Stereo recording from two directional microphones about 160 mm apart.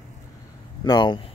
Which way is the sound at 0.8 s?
30° left (ahead or behind).